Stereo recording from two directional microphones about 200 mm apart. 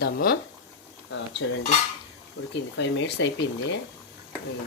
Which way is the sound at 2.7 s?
60° left (ahead or behind).